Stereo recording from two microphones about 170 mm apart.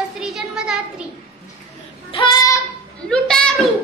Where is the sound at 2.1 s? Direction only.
25° left (ahead or behind).